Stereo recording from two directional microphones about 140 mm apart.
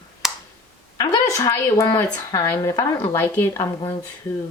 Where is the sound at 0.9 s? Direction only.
30° left (ahead or behind).